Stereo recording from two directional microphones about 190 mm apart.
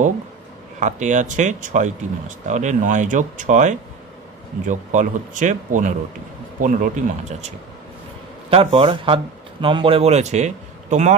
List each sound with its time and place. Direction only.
0.7 s speech: 40° right (ahead or behind)
8.5 s a man's voice: 30° right (ahead or behind)